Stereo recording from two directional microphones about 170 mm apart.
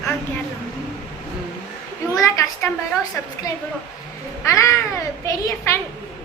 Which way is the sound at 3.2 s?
10° left (ahead or behind).